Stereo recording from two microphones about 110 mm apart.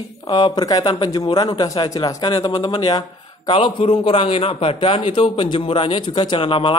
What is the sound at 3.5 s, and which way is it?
A man's voice, 60° left (ahead or behind).